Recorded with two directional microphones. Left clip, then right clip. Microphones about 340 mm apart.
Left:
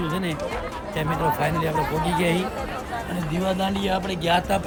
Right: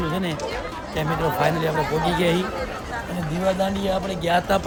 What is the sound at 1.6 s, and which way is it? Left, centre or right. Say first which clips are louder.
Music: right 2 dB; centre.